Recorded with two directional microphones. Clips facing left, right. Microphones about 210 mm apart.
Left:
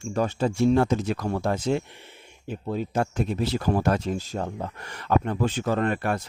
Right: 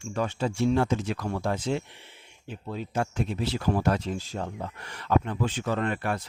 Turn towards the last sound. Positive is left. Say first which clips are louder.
# left 3 dB
turn(degrees=45)  # may be behind; listen again after turning